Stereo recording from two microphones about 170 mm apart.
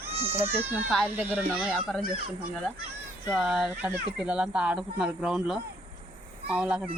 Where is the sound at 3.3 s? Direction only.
Centre (ahead or behind).